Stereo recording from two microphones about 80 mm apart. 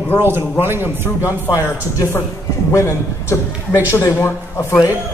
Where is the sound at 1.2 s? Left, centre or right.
Left.